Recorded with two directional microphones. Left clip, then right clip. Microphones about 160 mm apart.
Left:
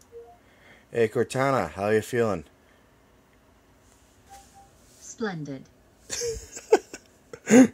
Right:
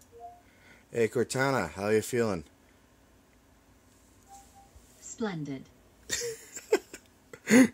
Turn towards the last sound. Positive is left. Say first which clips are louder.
# left 5 dB
turn(degrees=5)  # may be behind; listen again after turning